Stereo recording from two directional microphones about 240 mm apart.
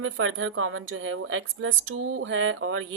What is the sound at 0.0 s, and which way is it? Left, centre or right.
A woman's voice, right.